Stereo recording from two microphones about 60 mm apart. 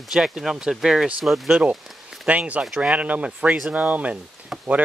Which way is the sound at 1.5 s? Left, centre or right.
Centre.